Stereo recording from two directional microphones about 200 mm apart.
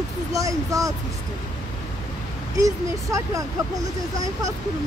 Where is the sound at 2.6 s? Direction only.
15° right (ahead or behind).